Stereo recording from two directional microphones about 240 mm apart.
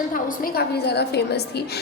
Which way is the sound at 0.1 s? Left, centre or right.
Left.